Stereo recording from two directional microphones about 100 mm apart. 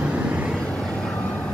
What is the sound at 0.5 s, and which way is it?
Vehicle, 5° left (ahead or behind).